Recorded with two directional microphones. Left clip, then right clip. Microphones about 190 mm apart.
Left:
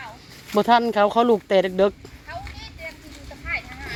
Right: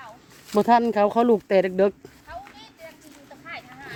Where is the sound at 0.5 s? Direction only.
25° right (ahead or behind).